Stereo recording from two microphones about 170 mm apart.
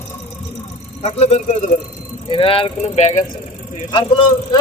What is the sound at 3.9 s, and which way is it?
Speech, 30° left (ahead or behind).